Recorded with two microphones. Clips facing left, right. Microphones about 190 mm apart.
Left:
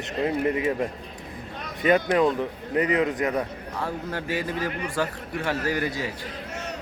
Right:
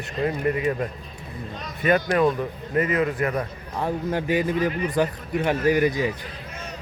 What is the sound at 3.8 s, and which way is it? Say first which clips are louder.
A man's voice: right 5 dB; 20° right (ahead or behind).